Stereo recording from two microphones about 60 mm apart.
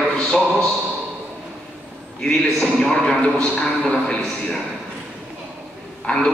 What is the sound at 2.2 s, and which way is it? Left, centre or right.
A man's voice, centre.